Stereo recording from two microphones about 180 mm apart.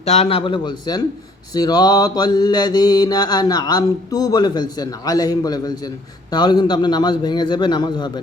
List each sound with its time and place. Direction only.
0.0 s mantra: 35° left (ahead or behind)